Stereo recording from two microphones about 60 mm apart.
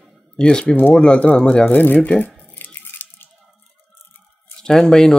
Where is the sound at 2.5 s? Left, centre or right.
Left.